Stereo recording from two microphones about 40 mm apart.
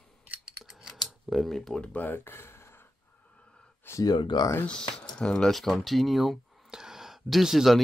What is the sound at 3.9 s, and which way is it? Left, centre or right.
Speech, left.